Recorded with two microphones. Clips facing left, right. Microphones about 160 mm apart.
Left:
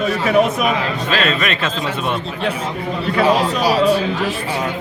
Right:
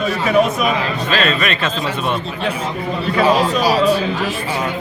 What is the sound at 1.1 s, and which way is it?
Speech, 5° left (ahead or behind).